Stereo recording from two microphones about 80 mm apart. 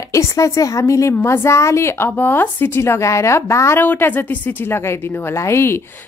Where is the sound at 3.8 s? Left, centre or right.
Left.